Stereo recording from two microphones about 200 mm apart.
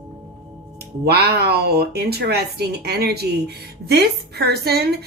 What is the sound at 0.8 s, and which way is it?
A woman's voice, 55° right (ahead or behind).